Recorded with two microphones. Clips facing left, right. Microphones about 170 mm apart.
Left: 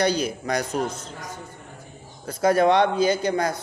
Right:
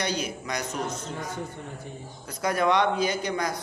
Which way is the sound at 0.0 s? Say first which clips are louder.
Left 7 dB; 30° left (ahead or behind).